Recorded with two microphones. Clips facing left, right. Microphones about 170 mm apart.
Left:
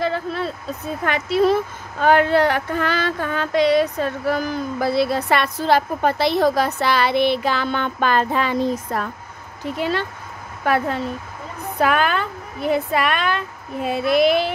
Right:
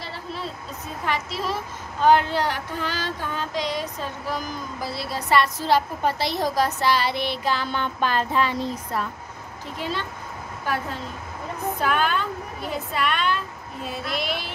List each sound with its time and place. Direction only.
0.0 s vehicle: 55° left (ahead or behind)
1.0 s female singing: 60° left (ahead or behind)
9.8 s speech: 65° left (ahead or behind)
11.8 s female singing: 70° left (ahead or behind)